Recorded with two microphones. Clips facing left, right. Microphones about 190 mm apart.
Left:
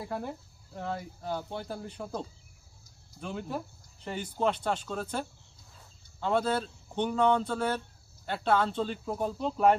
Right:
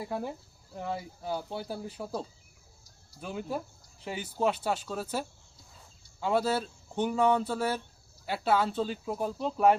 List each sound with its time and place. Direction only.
0.1 s speech: 5° right (ahead or behind)